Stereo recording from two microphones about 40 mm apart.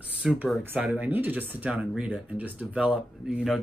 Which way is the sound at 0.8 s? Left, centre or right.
Right.